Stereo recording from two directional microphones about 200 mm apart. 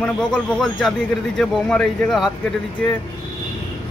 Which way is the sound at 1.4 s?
5° left (ahead or behind).